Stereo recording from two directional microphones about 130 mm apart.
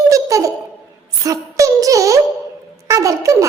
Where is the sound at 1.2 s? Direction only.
25° right (ahead or behind).